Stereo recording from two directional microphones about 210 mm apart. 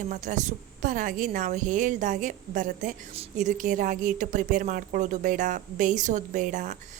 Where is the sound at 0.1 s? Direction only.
40° right (ahead or behind).